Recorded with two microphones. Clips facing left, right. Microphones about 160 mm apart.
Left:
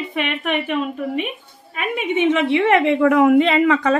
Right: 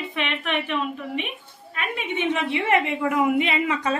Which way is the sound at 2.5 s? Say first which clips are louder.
Left 7 dB; 70° left (ahead or behind).